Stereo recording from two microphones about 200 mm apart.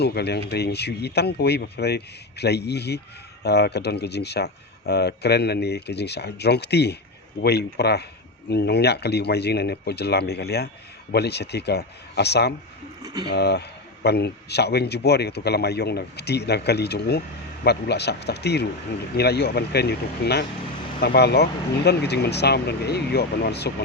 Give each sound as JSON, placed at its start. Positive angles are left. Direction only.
{"t": 0.0, "sound": "a man's voice", "side_deg": 55}
{"t": 13.0, "sound": "a sound", "side_deg": -20}
{"t": 13.3, "sound": "a man's voice", "side_deg": 55}